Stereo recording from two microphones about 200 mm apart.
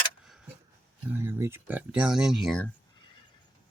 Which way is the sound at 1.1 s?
10° right (ahead or behind).